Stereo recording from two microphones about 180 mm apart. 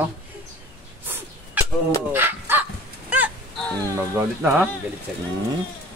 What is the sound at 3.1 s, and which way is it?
Wail, 10° right (ahead or behind).